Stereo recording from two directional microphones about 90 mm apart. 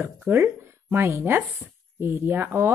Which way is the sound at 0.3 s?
30° right (ahead or behind).